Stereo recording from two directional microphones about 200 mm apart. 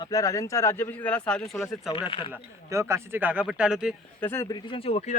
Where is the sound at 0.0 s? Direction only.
15° left (ahead or behind).